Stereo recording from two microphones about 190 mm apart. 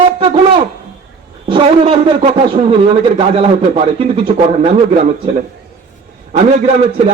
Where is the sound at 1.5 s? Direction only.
30° right (ahead or behind).